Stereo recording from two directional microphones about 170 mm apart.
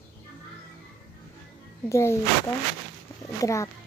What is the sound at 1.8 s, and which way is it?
Speech, 15° left (ahead or behind).